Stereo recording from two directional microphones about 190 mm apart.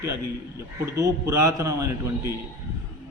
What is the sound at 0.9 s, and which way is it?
A man's voice, 15° right (ahead or behind).